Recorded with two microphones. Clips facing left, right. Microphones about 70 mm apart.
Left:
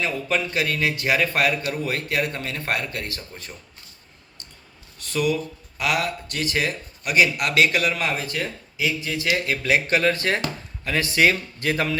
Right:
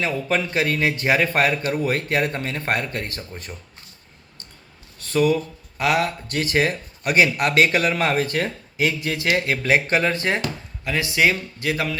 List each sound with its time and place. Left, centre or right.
0.0 s a man's voice: right
5.0 s speech: right
9.3 s a man's voice: right
10.4 s speech: centre